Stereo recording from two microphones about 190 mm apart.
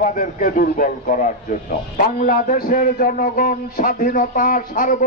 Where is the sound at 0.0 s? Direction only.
45° left (ahead or behind).